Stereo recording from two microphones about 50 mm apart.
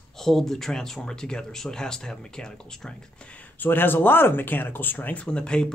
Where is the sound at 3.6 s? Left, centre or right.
Left.